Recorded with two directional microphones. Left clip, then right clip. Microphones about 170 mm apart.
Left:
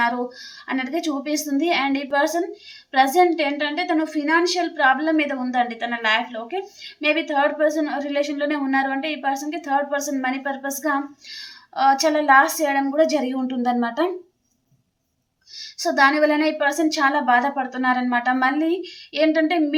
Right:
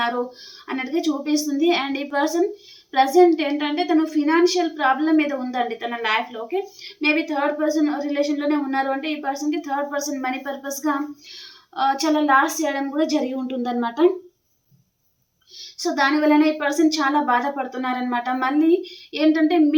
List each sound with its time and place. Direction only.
0.0 s a woman's voice: 20° left (ahead or behind)
7.2 s a woman's voice: 20° left (ahead or behind)
15.5 s a woman's voice: 20° left (ahead or behind)